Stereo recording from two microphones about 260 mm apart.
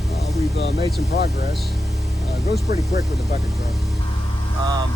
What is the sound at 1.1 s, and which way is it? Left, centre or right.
Speech, left.